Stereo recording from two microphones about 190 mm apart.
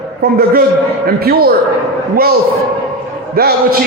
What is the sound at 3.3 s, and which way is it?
Speech, 55° right (ahead or behind).